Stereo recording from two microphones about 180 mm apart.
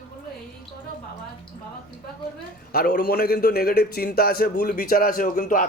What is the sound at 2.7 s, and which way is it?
A man's voice, 50° left (ahead or behind).